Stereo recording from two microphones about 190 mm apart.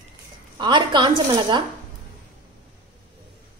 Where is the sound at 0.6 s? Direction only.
25° right (ahead or behind).